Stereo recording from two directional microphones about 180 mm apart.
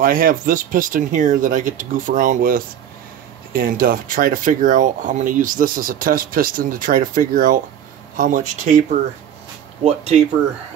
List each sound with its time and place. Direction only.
0.0 s speech: 50° right (ahead or behind)
9.8 s speech: 35° right (ahead or behind)